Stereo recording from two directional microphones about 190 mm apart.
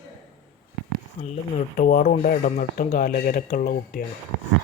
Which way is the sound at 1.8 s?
40° left (ahead or behind).